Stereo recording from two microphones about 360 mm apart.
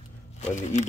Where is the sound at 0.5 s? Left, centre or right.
Centre.